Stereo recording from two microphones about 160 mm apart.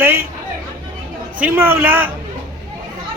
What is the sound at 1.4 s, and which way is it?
Speech, 15° right (ahead or behind).